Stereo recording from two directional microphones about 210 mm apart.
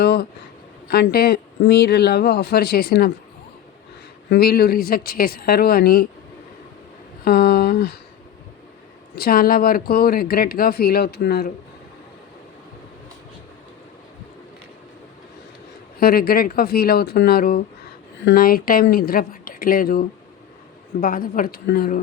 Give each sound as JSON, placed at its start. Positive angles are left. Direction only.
{"t": 0.0, "sound": "a sound", "side_deg": 50}
{"t": 0.9, "sound": "speech", "side_deg": 45}
{"t": 4.3, "sound": "speech", "side_deg": 45}
{"t": 7.3, "sound": "speech", "side_deg": 45}
{"t": 9.1, "sound": "speech", "side_deg": 45}
{"t": 16.0, "sound": "speech", "side_deg": 45}